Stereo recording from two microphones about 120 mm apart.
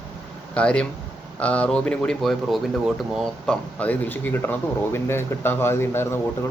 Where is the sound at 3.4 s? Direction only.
10° left (ahead or behind).